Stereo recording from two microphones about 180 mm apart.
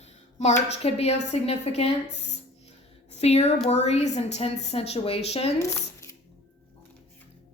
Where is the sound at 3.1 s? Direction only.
35° left (ahead or behind).